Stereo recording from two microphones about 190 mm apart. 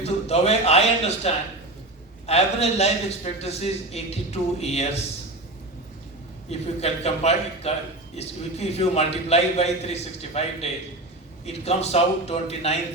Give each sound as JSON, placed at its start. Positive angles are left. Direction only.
{"t": 0.0, "sound": "a man's voice", "side_deg": 35}
{"t": 6.5, "sound": "a man's voice", "side_deg": 35}